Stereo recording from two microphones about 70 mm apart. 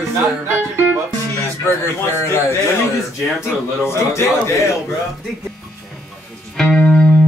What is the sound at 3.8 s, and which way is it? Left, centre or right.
Speech, left.